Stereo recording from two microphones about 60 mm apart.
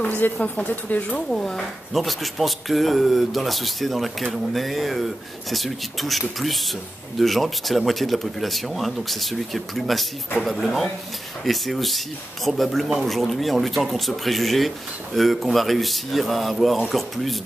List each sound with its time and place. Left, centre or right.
0.0 s speech: left
1.3 s speech: centre